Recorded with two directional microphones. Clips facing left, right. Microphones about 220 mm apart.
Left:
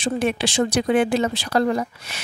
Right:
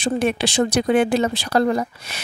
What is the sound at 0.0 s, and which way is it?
Speech, 40° right (ahead or behind).